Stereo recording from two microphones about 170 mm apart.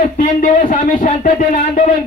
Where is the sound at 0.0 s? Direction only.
50° left (ahead or behind).